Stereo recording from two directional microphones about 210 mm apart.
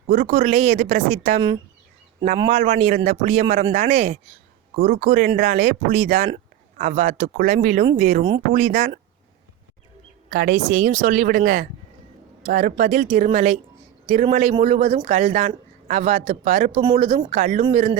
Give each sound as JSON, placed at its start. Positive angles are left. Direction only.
{"t": 0.1, "sound": "a man's voice", "side_deg": -40}
{"t": 2.4, "sound": "a man's voice", "side_deg": -30}
{"t": 10.3, "sound": "a man's voice", "side_deg": -40}